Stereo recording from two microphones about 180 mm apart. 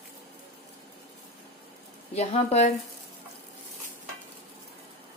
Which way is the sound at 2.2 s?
35° left (ahead or behind).